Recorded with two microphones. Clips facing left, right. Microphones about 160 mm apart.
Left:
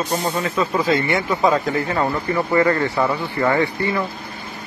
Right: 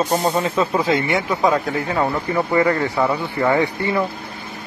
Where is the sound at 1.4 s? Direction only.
Centre (ahead or behind).